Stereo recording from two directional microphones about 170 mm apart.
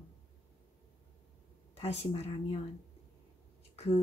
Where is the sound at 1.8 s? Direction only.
35° left (ahead or behind).